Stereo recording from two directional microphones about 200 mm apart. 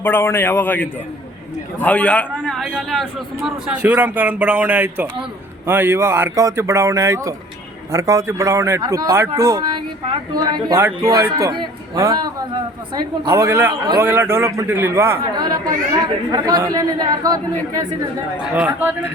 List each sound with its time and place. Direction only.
0.0 s a man's voice: 10° left (ahead or behind); by 17.8 s 20° right (ahead or behind)
18.5 s a man's voice: 10° right (ahead or behind)